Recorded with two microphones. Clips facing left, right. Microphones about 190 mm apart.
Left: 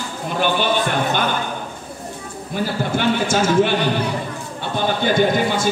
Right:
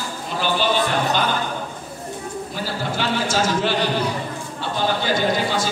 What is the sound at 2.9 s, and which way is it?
Speech, 55° left (ahead or behind).